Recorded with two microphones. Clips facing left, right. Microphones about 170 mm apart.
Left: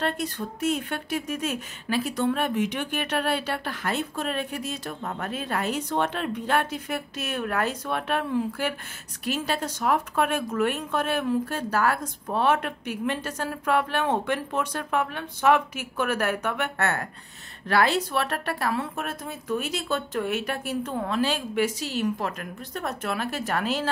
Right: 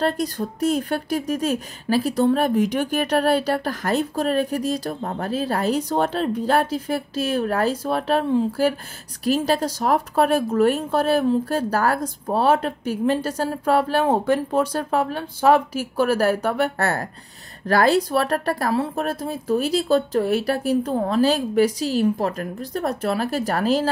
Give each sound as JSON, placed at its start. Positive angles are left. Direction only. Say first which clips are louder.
{"t": 0.0, "sound": "speech", "louder": "right 6 dB", "side_deg": -35}